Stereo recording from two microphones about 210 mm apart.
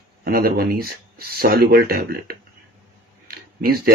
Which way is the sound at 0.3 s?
45° right (ahead or behind).